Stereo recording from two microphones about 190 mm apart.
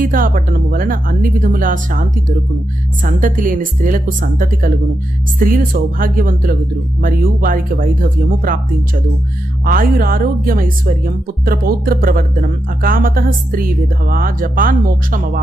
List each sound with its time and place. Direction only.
0.0 s speech: 45° right (ahead or behind)
9.6 s speech: 50° right (ahead or behind)